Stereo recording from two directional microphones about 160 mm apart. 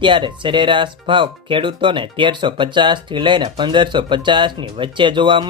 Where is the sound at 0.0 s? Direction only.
30° right (ahead or behind).